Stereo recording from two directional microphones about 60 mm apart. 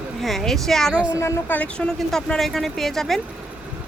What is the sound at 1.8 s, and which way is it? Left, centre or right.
Speech, centre.